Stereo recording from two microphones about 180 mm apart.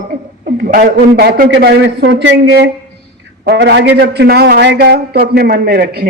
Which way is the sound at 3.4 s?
65° right (ahead or behind).